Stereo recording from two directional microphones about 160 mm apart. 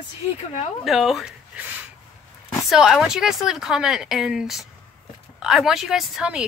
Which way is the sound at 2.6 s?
5° right (ahead or behind).